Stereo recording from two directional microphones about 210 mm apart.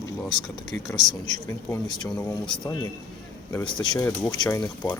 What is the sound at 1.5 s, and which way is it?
Speech, 15° left (ahead or behind).